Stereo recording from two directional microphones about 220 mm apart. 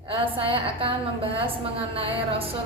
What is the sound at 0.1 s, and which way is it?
A woman's voice, 25° right (ahead or behind).